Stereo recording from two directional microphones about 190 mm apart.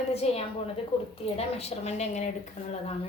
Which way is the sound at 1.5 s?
35° left (ahead or behind).